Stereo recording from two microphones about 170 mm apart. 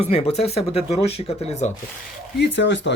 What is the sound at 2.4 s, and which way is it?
Speech, 90° left.